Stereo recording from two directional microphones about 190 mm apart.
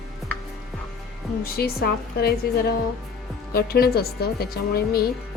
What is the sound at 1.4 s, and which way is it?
Speech, 55° left (ahead or behind).